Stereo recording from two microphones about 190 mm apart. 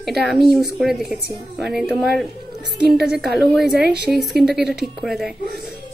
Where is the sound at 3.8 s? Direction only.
60° right (ahead or behind).